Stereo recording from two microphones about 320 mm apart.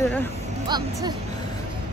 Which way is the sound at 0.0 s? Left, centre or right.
Centre.